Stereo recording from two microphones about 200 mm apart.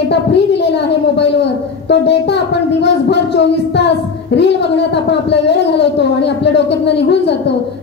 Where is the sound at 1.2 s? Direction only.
60° left (ahead or behind).